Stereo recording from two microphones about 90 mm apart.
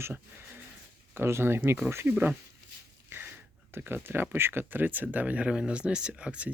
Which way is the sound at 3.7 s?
25° right (ahead or behind).